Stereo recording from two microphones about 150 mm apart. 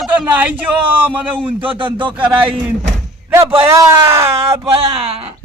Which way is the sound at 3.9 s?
20° right (ahead or behind).